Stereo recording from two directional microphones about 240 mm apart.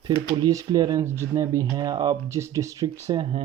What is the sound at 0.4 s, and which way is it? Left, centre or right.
Speech, centre.